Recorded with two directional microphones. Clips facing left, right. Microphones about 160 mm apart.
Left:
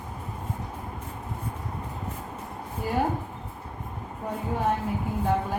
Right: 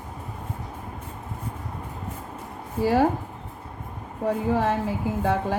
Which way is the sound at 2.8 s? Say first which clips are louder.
Right 7 dB; 90° right.